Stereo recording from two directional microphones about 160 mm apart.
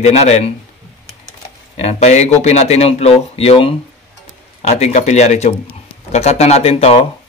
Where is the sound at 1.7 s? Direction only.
45° left (ahead or behind).